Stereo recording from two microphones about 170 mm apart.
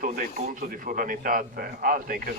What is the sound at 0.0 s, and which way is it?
A man's voice, 55° right (ahead or behind).